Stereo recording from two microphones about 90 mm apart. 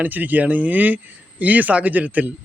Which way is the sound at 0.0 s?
20° right (ahead or behind).